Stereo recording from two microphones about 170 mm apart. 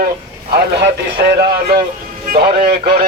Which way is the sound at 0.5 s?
75° right (ahead or behind).